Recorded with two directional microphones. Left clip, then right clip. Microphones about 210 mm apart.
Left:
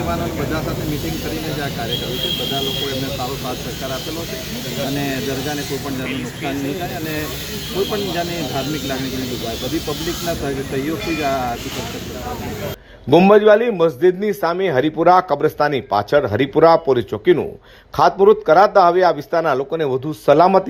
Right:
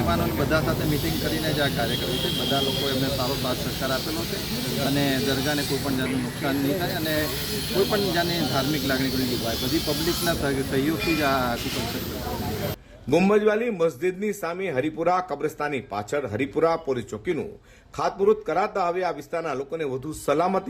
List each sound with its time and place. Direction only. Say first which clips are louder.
13.1 s a man's voice: left 10 dB; 10° left (ahead or behind)